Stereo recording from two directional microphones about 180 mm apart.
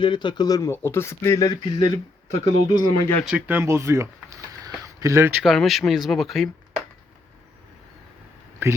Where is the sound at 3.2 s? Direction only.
10° right (ahead or behind).